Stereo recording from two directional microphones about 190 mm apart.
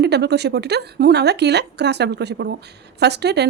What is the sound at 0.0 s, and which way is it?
A woman's voice, 60° right (ahead or behind).